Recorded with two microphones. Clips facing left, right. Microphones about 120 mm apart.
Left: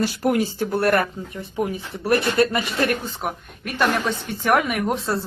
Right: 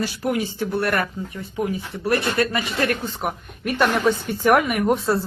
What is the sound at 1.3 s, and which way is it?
Speech, 25° left (ahead or behind).